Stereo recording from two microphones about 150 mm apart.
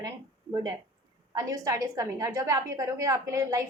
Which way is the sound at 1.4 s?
20° right (ahead or behind).